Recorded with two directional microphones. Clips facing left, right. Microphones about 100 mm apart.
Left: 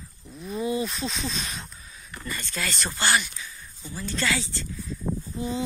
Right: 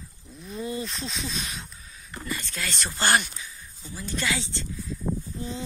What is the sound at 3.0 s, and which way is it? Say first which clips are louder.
Speech: right 2 dB; 50° right (ahead or behind).